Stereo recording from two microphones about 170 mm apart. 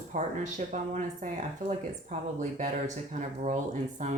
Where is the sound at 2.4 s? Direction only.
50° right (ahead or behind).